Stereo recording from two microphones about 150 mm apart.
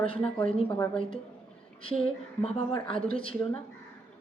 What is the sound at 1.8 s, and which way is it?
A woman's voice, 40° left (ahead or behind).